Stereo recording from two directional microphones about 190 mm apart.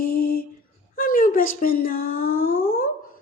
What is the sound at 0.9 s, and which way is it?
Speech, 50° left (ahead or behind).